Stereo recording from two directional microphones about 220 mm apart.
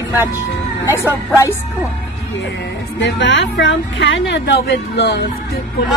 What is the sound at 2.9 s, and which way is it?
A woman's voice, 55° left (ahead or behind).